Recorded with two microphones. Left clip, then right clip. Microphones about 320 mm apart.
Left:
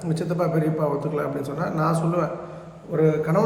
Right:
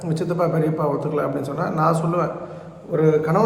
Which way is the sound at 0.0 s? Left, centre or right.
Centre.